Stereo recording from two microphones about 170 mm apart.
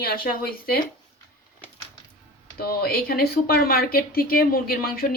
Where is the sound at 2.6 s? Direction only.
65° left (ahead or behind).